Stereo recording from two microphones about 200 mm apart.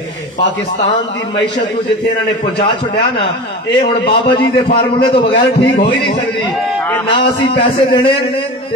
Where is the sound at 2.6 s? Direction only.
25° left (ahead or behind).